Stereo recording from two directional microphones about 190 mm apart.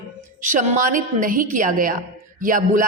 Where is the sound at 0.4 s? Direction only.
40° right (ahead or behind).